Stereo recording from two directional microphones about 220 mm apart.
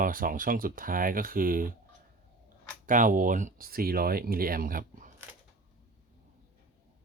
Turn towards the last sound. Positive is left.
turn(degrees=-35)  # may be behind; listen again after turning